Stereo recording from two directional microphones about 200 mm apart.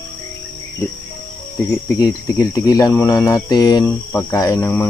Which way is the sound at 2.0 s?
20° left (ahead or behind).